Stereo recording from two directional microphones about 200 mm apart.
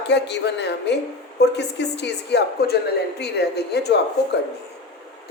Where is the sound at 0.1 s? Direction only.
60° left (ahead or behind).